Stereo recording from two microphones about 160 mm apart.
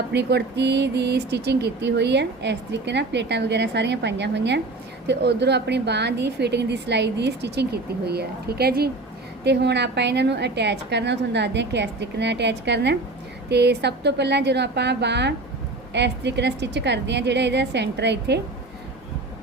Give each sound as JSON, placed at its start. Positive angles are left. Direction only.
{"t": 0.1, "sound": "speech", "side_deg": -90}